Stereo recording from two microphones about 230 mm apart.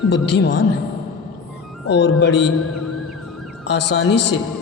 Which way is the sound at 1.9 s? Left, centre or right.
Left.